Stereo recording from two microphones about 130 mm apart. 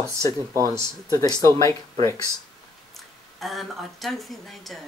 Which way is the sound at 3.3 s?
Centre (ahead or behind).